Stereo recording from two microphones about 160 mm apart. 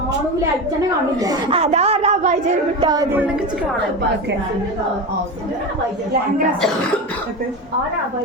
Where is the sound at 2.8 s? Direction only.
25° right (ahead or behind).